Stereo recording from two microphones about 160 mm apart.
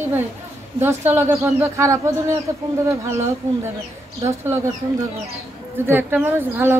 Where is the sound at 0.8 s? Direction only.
15° right (ahead or behind).